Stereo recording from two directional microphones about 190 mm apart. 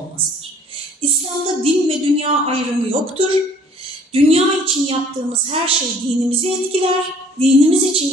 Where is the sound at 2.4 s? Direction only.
30° right (ahead or behind).